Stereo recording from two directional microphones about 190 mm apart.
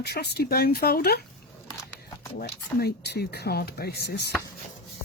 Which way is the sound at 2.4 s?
60° left (ahead or behind).